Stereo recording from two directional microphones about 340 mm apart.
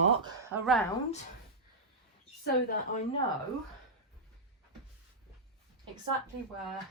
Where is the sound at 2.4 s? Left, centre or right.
Left.